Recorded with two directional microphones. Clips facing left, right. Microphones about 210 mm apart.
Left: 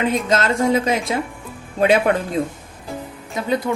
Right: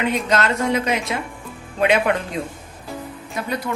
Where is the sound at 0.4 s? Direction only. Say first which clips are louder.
Left 3 dB; 30° left (ahead or behind).